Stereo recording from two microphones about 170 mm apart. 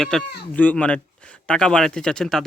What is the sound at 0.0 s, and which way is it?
Speech, centre (ahead or behind).